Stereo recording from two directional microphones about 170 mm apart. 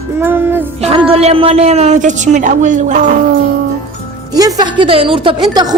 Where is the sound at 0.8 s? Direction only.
35° right (ahead or behind).